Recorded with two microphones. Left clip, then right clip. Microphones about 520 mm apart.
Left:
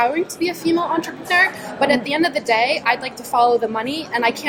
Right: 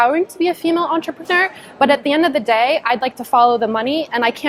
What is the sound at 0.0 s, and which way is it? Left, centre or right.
A woman's voice, right.